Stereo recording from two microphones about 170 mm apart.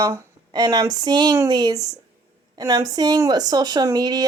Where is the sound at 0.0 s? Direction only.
20° right (ahead or behind).